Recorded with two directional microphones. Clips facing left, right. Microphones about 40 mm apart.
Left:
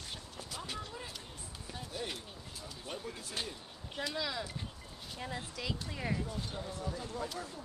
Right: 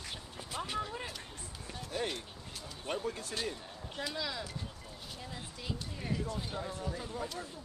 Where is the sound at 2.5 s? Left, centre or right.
Right.